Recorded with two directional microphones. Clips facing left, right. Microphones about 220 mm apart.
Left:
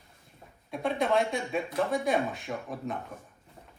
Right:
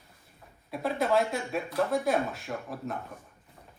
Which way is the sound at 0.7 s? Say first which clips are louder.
Even; 5° right (ahead or behind).